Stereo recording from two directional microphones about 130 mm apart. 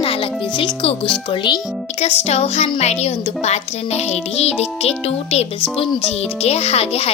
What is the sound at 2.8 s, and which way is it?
Speech, 55° left (ahead or behind).